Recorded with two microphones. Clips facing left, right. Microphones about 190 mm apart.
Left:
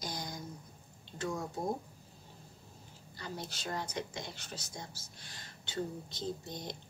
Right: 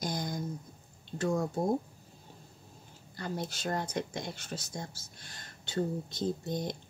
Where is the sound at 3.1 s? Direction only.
50° right (ahead or behind).